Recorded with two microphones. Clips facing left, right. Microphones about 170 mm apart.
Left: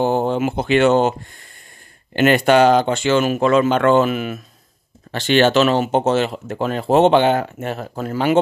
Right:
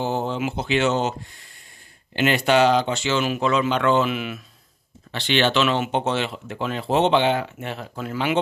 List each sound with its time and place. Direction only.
0.0 s speech: 55° left (ahead or behind)